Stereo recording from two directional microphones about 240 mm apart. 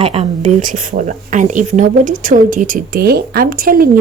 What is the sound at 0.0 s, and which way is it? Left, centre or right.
A woman's voice, right.